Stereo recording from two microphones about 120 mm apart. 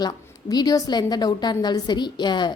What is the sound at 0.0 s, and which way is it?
A woman's voice, 35° left (ahead or behind).